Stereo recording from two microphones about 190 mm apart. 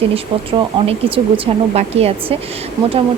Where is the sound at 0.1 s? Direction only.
30° right (ahead or behind).